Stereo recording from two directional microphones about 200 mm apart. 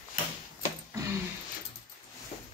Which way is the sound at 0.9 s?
15° right (ahead or behind).